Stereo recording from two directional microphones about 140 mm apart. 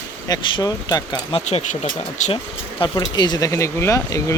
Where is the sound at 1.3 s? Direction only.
45° left (ahead or behind).